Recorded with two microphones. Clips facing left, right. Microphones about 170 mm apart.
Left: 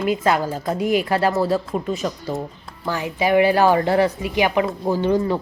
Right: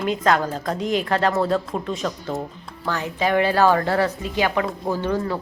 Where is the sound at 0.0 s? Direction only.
5° left (ahead or behind).